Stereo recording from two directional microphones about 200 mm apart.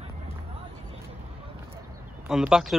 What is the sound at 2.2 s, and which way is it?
Speech, 5° right (ahead or behind).